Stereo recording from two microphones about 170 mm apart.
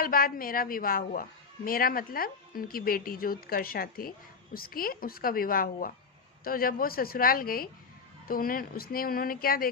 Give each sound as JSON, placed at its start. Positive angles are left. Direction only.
{"t": 0.0, "sound": "a woman's voice", "side_deg": 55}